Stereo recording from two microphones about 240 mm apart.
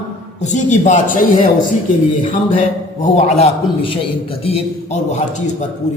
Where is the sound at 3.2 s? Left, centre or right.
Left.